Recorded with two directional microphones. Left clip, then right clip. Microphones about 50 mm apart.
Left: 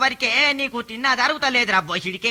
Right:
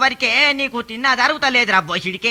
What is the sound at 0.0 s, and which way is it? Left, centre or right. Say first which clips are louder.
Speech: right 3 dB; left.